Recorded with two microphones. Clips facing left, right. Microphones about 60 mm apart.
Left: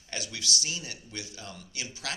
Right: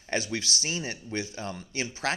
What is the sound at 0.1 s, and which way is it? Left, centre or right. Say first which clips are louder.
A man's voice: right 5 dB; right.